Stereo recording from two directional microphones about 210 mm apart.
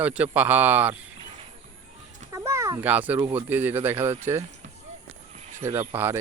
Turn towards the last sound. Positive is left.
turn(degrees=-10)  # may be behind; listen again after turning